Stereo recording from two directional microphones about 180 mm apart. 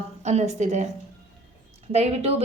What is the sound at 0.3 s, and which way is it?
Speech, 40° right (ahead or behind).